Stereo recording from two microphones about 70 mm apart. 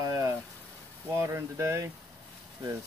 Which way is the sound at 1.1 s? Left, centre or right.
Right.